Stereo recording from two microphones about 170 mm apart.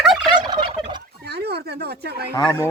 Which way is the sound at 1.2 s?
70° right (ahead or behind).